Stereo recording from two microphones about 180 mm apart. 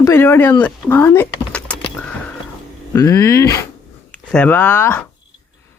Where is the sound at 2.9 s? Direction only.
20° left (ahead or behind).